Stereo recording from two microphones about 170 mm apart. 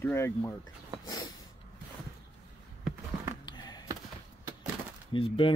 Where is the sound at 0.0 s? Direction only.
15° left (ahead or behind).